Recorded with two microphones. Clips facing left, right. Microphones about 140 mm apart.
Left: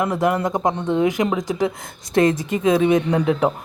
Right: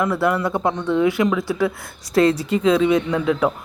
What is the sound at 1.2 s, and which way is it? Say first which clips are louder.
Speech: right 1 dB; 40° left (ahead or behind).